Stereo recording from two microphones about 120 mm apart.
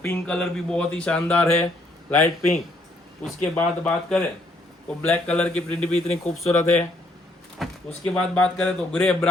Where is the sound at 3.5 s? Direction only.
10° left (ahead or behind).